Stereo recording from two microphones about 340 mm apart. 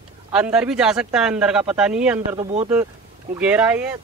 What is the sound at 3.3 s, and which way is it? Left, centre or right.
Speech, centre.